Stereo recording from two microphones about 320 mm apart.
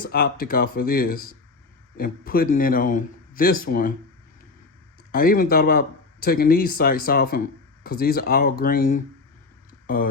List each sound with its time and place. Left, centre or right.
0.0 s speech: left
5.1 s speech: left